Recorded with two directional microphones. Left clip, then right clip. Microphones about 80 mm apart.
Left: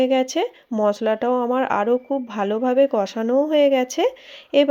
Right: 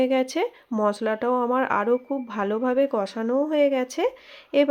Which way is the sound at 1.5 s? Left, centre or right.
Centre.